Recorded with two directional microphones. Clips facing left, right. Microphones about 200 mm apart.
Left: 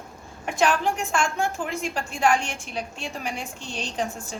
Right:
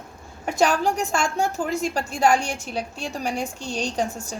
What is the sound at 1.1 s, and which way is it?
A woman's voice, 40° right (ahead or behind).